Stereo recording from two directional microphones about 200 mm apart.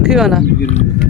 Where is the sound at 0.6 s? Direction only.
35° left (ahead or behind).